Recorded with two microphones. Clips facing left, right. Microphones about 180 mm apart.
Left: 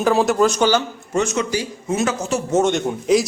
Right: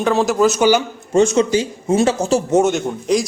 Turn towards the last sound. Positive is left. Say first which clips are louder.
# left 1 dB
turn(degrees=5)  # may be behind; listen again after turning